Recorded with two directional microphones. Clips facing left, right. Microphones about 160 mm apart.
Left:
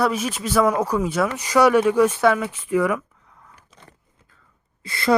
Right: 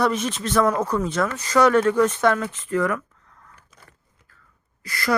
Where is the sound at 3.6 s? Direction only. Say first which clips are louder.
Left 4 dB; 25° left (ahead or behind).